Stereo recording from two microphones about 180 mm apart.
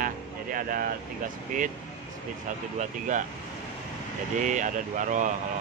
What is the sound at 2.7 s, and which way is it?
Speech, 45° right (ahead or behind).